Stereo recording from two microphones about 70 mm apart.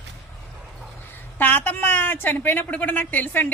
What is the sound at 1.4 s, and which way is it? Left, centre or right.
A woman's voice, left.